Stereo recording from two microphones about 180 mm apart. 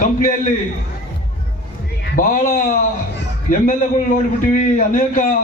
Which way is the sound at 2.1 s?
50° left (ahead or behind).